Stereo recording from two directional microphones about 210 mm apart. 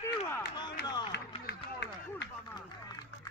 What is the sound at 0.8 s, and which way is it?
Music, 20° left (ahead or behind).